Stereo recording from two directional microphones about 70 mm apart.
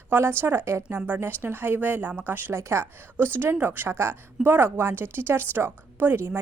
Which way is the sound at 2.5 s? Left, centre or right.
Right.